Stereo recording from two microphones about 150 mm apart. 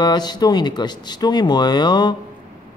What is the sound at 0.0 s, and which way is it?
Speech, 30° left (ahead or behind).